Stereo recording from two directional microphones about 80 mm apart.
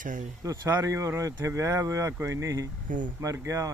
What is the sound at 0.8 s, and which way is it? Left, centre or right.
Speech, right.